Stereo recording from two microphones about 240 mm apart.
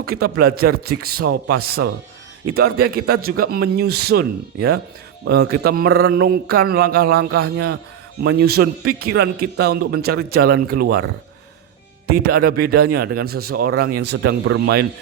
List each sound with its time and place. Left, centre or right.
0.0 s a man's voice: right
12.0 s a man's voice: right